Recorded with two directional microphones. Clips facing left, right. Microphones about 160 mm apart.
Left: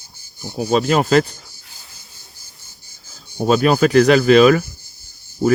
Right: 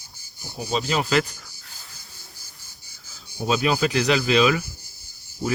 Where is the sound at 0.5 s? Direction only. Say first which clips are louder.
Left 8 dB; 55° left (ahead or behind).